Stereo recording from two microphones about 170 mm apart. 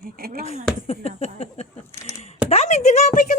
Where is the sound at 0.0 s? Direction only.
60° right (ahead or behind).